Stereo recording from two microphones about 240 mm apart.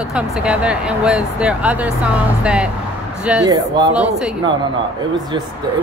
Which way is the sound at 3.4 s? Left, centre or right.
Centre.